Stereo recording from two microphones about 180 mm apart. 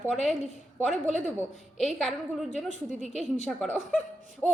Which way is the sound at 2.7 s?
40° left (ahead or behind).